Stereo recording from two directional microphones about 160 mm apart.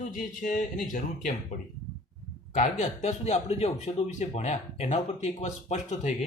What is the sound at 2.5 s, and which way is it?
Speech, 50° left (ahead or behind).